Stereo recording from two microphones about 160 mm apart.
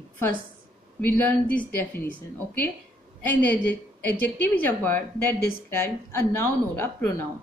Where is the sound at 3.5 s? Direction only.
10° left (ahead or behind).